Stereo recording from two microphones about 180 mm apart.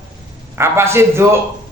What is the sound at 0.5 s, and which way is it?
Speech, 15° right (ahead or behind).